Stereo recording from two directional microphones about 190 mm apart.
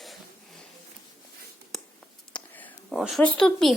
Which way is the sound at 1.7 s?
Centre (ahead or behind).